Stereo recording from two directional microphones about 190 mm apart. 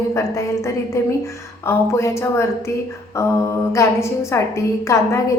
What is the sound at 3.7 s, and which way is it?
A woman's voice, 15° left (ahead or behind).